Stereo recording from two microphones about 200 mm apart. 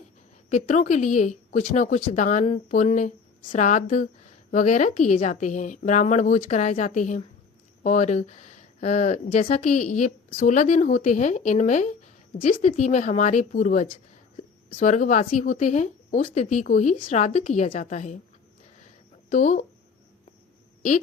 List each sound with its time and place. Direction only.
0.5 s speech: 35° left (ahead or behind)
19.3 s speech: 40° left (ahead or behind)